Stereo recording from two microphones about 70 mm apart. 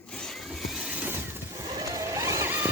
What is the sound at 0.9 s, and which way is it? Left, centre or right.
Vehicle, centre.